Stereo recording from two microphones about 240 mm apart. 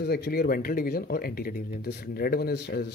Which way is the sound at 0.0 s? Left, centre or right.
Left.